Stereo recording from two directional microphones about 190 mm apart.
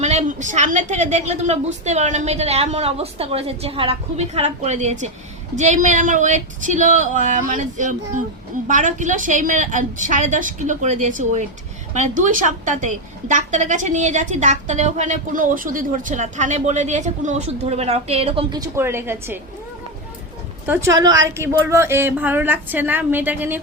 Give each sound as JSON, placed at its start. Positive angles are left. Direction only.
{"t": 0.0, "sound": "a woman's voice", "side_deg": -35}
{"t": 18.6, "sound": "a woman's voice", "side_deg": -15}
{"t": 20.7, "sound": "a woman's voice", "side_deg": -15}